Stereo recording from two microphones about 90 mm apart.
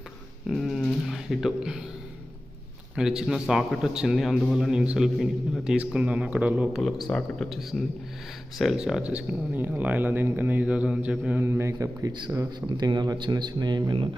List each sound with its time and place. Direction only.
0.4 s a sound: centre (ahead or behind)
1.0 s speech: centre (ahead or behind)
2.9 s a man's voice: 5° right (ahead or behind)
7.1 s speech: 15° left (ahead or behind)
7.5 s a man's voice: centre (ahead or behind)
11.3 s speech: 25° right (ahead or behind)
12.5 s speech: 55° right (ahead or behind)